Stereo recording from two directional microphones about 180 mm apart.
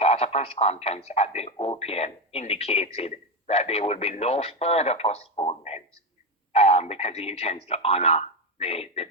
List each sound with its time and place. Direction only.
0.0 s speech: 35° left (ahead or behind)